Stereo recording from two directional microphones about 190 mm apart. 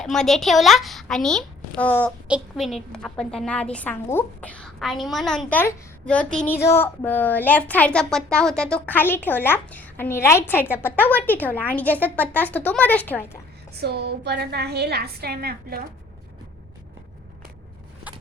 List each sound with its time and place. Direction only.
0.0 s a woman's voice: centre (ahead or behind)
2.2 s a woman's voice: 5° right (ahead or behind)
13.7 s a woman's voice: 60° right (ahead or behind)